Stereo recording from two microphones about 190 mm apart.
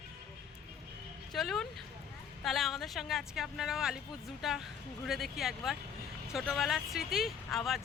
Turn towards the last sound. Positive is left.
turn(degrees=0)  # may be behind; listen again after turning